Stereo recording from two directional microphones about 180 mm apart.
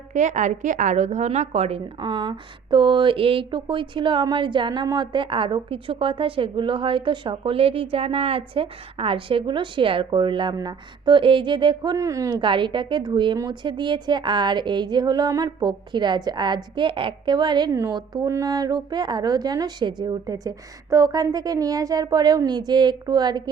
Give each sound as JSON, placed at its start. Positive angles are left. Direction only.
{"t": 0.1, "sound": "a woman's voice", "side_deg": -40}